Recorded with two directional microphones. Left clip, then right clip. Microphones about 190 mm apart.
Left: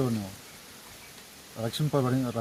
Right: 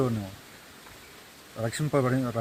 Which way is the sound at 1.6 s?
10° right (ahead or behind).